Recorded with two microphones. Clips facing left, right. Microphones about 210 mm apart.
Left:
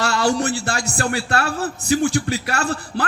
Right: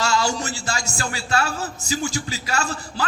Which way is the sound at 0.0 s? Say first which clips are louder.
Left 4 dB; 60° left (ahead or behind).